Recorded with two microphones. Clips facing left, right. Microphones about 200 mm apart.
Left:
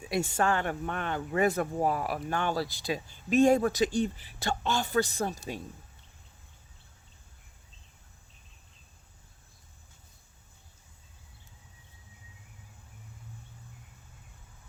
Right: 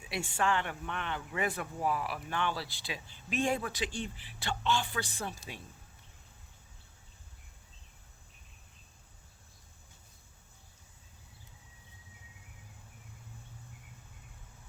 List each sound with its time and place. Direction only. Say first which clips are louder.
0.0 s speech: left 5 dB; 40° left (ahead or behind)